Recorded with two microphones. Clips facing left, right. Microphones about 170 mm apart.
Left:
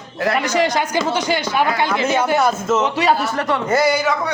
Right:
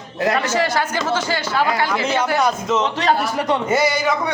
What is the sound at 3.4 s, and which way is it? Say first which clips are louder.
Speech: even; 20° right (ahead or behind).